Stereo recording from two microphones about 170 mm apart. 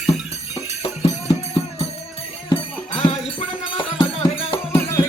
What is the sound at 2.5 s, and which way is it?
Music, 30° left (ahead or behind).